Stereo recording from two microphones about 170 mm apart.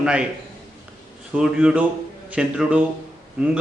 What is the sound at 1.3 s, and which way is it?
A man's voice, 5° right (ahead or behind).